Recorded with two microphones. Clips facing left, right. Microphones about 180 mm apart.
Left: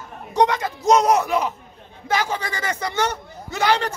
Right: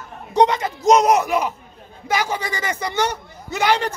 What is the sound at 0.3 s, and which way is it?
A man's voice, 25° right (ahead or behind).